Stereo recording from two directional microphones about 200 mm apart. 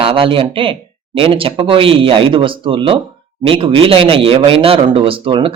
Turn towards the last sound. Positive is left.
turn(degrees=-25)  # may be behind; listen again after turning